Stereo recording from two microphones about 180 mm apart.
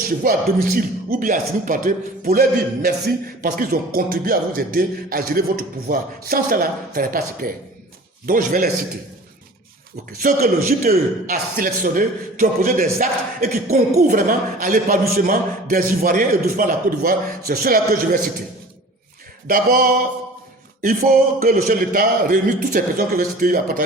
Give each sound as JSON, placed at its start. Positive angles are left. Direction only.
{"t": 0.2, "sound": "a man's voice", "side_deg": -55}
{"t": 10.1, "sound": "a man's voice", "side_deg": -55}
{"t": 19.5, "sound": "a man's voice", "side_deg": -50}